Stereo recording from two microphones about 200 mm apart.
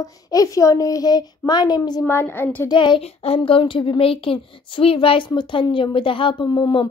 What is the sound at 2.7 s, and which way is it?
A child's voice, 25° left (ahead or behind).